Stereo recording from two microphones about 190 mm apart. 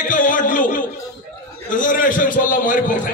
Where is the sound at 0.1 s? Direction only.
45° left (ahead or behind).